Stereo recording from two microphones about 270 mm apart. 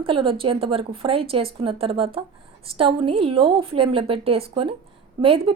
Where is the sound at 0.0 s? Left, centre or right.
Centre.